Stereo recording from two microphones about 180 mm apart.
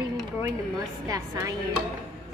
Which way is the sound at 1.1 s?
20° right (ahead or behind).